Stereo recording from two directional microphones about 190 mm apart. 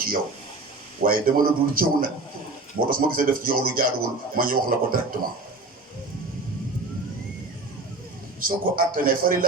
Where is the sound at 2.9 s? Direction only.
50° right (ahead or behind).